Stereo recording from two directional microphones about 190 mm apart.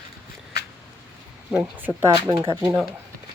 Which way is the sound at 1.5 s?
10° right (ahead or behind).